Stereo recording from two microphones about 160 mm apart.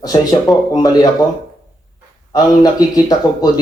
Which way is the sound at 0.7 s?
25° left (ahead or behind).